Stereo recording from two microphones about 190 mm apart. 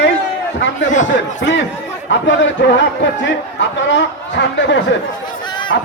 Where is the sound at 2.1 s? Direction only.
75° left (ahead or behind).